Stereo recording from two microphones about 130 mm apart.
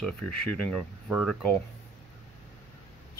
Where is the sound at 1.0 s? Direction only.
Centre (ahead or behind).